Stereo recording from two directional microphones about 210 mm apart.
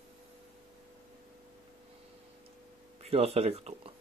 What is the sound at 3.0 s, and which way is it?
Speech, 30° right (ahead or behind).